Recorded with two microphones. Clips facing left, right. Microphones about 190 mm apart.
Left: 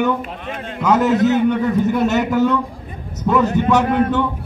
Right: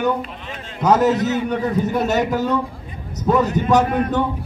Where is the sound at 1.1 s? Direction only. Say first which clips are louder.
Left 4 dB; 60° left (ahead or behind).